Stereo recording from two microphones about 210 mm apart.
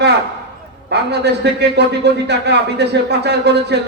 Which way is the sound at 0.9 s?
50° right (ahead or behind).